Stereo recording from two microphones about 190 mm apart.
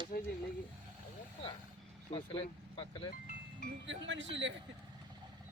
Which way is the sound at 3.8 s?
75° right (ahead or behind).